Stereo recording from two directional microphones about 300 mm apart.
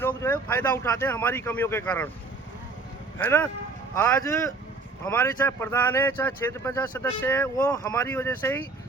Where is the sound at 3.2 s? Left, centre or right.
Centre.